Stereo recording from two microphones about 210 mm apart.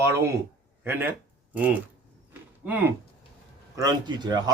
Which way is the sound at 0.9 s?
10° right (ahead or behind).